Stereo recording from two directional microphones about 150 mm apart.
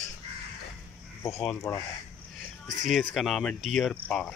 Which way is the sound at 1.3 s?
Centre (ahead or behind).